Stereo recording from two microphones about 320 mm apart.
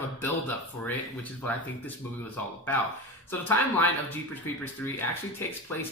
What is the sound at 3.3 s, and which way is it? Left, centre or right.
Speech, centre.